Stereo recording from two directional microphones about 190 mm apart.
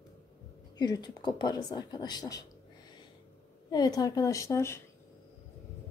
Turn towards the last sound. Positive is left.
turn(degrees=15)  # may be behind; listen again after turning